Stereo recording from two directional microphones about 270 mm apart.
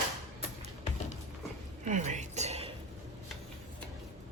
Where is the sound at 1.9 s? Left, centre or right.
Right.